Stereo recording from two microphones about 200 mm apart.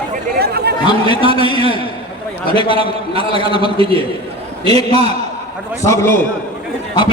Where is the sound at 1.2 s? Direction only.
25° right (ahead or behind).